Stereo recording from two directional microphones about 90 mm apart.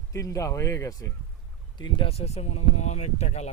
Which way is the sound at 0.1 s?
35° left (ahead or behind).